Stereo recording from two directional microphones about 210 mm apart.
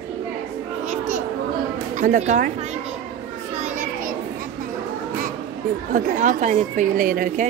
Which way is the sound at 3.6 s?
35° right (ahead or behind).